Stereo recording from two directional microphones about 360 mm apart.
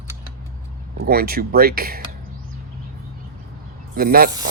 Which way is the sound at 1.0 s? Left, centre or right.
Right.